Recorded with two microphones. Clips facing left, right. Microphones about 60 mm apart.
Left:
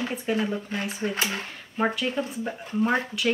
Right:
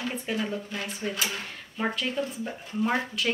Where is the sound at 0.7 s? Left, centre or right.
Left.